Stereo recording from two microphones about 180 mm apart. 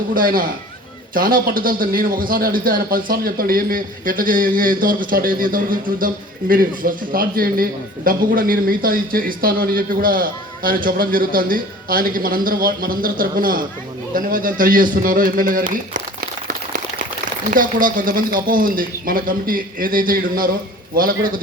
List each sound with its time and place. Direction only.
0.1 s a man's voice: 50° right (ahead or behind)
17.5 s a man's voice: 50° right (ahead or behind)